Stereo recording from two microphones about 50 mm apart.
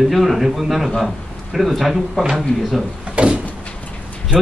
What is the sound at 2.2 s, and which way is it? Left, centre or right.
Speech, centre.